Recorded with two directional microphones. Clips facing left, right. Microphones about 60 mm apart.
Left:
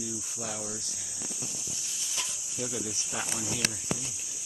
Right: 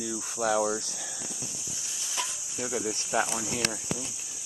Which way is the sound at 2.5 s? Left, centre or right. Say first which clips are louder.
Right 4 dB; right.